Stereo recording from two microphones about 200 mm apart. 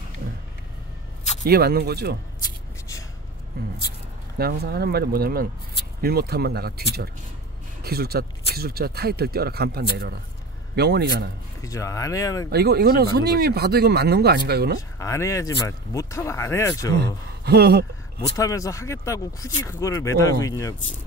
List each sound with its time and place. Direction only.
1.4 s speech: 50° right (ahead or behind)
3.6 s a sound: 50° right (ahead or behind)
4.4 s a man's voice: 50° right (ahead or behind)
11.6 s speech: 15° left (ahead or behind)
12.4 s speech: 55° right (ahead or behind)
14.8 s speech: 15° left (ahead or behind)
17.5 s a man's voice: 55° right (ahead or behind)
18.3 s speech: 15° left (ahead or behind)